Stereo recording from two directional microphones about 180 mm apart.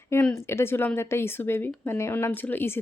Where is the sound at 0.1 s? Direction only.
10° left (ahead or behind).